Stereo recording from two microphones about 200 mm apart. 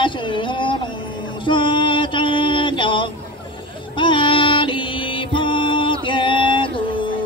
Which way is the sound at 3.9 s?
25° left (ahead or behind).